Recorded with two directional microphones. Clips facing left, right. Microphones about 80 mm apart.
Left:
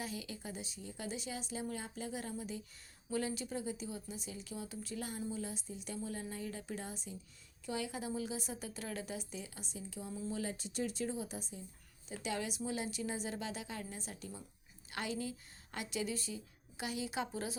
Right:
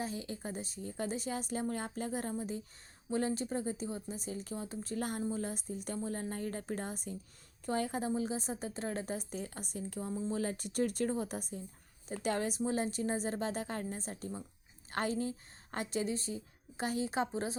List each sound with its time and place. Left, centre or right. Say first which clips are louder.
0.0 s a woman's voice: right 4 dB; right
10.2 s a woman's voice: right 4 dB; right
10.4 s a woman's voice: right 5 dB; right